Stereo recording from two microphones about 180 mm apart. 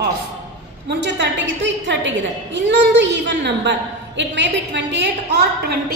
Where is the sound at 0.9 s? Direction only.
75° right (ahead or behind); by 6.0 s 60° right (ahead or behind).